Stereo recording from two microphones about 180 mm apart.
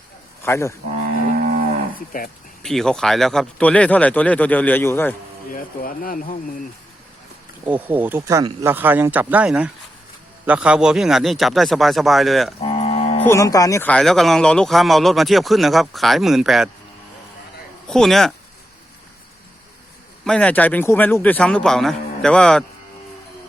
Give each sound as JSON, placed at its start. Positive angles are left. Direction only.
{"t": 0.4, "sound": "speech", "side_deg": 15}
{"t": 2.1, "sound": "speech", "side_deg": 50}
{"t": 2.6, "sound": "speech", "side_deg": 0}
{"t": 5.5, "sound": "speech", "side_deg": 50}
{"t": 7.6, "sound": "speech", "side_deg": -10}
{"t": 12.6, "sound": "cattle", "side_deg": 35}
{"t": 13.2, "sound": "speech", "side_deg": 15}
{"t": 17.8, "sound": "speech", "side_deg": 0}
{"t": 20.2, "sound": "speech", "side_deg": 5}